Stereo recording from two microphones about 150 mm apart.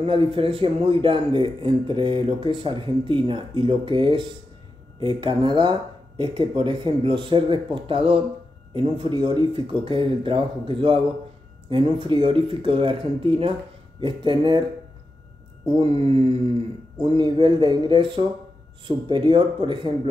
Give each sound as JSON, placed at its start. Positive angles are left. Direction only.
{"t": 0.0, "sound": "a man's voice", "side_deg": -35}
{"t": 15.7, "sound": "a man's voice", "side_deg": -40}